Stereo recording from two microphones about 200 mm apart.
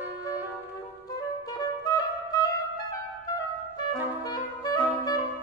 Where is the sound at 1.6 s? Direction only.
20° left (ahead or behind).